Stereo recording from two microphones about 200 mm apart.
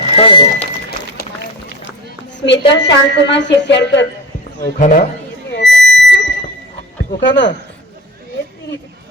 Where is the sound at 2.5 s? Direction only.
60° left (ahead or behind).